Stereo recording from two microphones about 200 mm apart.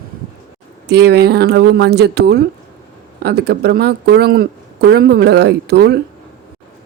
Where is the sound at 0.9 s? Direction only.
55° right (ahead or behind).